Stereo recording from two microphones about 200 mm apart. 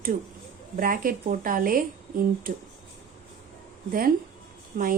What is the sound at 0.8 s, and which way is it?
Speech, 45° right (ahead or behind).